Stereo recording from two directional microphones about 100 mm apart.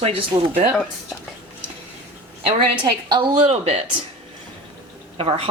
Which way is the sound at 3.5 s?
90° right.